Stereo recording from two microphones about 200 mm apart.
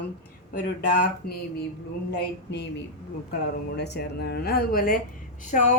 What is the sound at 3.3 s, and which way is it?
A woman's voice, 55° left (ahead or behind).